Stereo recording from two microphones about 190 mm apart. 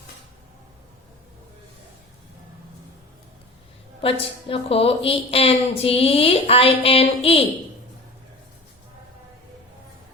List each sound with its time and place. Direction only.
4.0 s a woman's voice: 30° left (ahead or behind)